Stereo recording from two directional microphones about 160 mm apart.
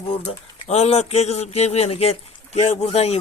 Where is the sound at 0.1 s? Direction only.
40° left (ahead or behind).